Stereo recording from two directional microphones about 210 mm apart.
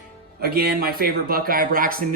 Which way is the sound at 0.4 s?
45° right (ahead or behind).